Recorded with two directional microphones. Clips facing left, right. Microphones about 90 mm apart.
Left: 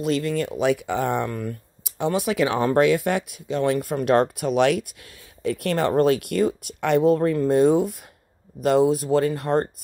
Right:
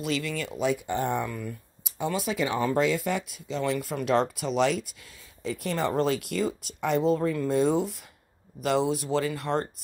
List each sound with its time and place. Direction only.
0.0 s speech: 40° left (ahead or behind)
0.5 s speech: 70° left (ahead or behind); by 1.3 s 90° left
1.3 s speech: 55° left (ahead or behind)